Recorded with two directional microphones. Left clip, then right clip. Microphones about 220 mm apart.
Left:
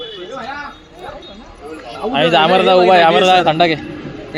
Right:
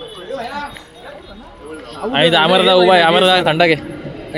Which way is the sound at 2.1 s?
5° right (ahead or behind).